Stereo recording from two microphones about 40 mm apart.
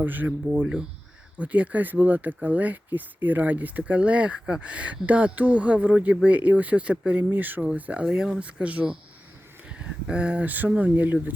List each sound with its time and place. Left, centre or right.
0.0 s speech: right
1.4 s speech: right
7.2 s speech: right
7.8 s speech: right
8.0 s speech: right
8.6 s speech: right
9.6 s a sound: right
10.4 s speech: right